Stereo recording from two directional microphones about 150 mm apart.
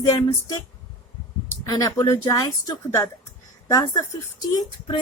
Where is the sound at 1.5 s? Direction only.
25° left (ahead or behind).